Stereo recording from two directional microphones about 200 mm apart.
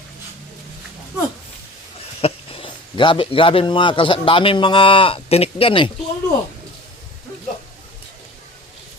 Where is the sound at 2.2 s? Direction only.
30° left (ahead or behind).